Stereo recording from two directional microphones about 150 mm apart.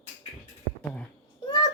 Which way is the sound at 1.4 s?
30° left (ahead or behind).